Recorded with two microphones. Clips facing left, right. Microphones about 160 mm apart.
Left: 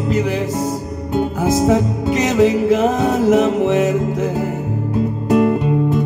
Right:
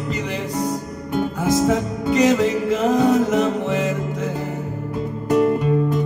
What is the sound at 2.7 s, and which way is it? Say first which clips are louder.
Music: left 1 dB; centre (ahead or behind).